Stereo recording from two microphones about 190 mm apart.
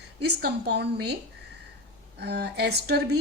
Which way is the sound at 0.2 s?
60° right (ahead or behind).